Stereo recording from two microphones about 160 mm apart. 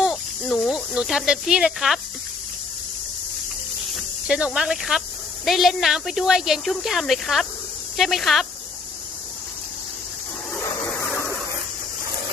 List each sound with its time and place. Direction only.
0.0 s snake: 5° left (ahead or behind)
4.3 s speech: 5° right (ahead or behind)
10.5 s a sound: 15° left (ahead or behind)